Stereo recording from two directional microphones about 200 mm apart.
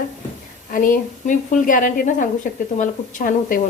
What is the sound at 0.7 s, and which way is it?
A woman's voice, 45° left (ahead or behind).